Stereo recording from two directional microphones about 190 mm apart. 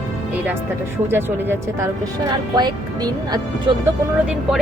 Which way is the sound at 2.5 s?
20° right (ahead or behind).